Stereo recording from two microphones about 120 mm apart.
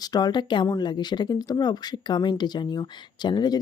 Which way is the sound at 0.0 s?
35° left (ahead or behind).